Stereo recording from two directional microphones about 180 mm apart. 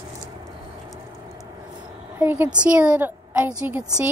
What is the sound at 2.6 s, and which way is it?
A woman's voice, 5° right (ahead or behind).